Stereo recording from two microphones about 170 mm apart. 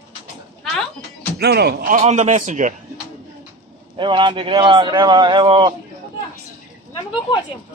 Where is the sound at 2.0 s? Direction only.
40° right (ahead or behind).